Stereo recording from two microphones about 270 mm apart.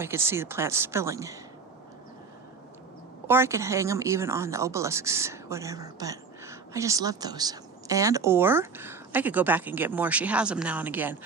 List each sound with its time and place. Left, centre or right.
0.0 s speech: centre
3.2 s speech: centre